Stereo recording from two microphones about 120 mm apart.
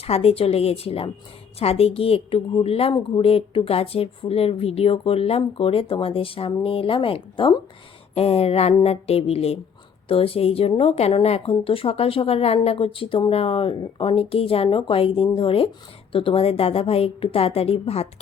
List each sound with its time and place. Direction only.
0.0 s a woman's voice: 60° left (ahead or behind)